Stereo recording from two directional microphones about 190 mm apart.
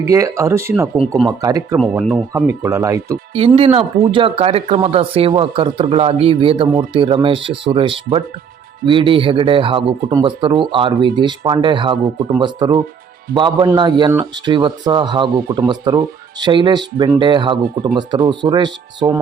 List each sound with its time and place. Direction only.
0.0 s speech: 15° right (ahead or behind)
1.1 s speech: centre (ahead or behind)
1.4 s speech: 20° right (ahead or behind)
1.8 s speech: centre (ahead or behind)
2.3 s speech: 15° right (ahead or behind)
3.3 s speech: 30° right (ahead or behind)
15.3 s speech: 50° right (ahead or behind)
15.5 s speech: 20° right (ahead or behind)